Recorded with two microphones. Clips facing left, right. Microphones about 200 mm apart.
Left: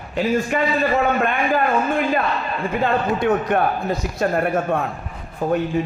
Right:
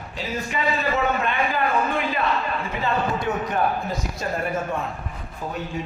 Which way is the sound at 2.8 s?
60° left (ahead or behind).